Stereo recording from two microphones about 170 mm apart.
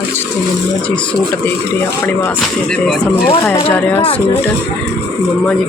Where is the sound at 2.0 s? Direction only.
10° left (ahead or behind).